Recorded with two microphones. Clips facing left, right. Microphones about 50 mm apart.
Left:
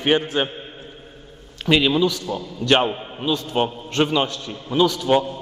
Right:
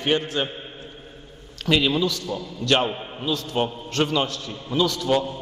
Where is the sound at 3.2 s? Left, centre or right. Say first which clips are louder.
Left 3 dB; centre.